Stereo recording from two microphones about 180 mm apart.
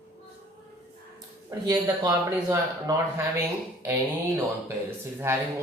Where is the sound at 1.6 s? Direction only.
20° right (ahead or behind).